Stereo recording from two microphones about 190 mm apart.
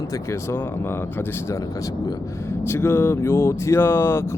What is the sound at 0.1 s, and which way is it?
Speech, 15° left (ahead or behind).